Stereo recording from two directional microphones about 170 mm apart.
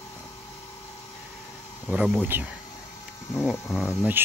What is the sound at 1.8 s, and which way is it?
Speech, centre (ahead or behind).